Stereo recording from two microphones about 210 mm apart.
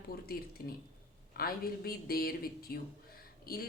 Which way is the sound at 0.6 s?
45° left (ahead or behind).